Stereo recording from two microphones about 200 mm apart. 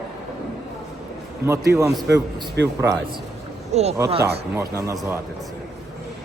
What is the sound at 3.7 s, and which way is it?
Speech, 35° right (ahead or behind).